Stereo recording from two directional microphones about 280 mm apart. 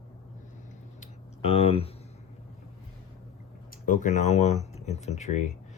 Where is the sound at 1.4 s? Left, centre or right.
Left.